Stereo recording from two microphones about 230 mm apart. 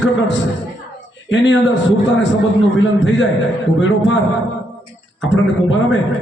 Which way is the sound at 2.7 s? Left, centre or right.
Left.